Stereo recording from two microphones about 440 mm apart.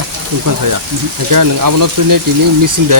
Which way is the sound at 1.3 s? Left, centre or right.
Right.